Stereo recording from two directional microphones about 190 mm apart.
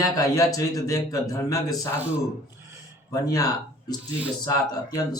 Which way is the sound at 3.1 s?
20° left (ahead or behind).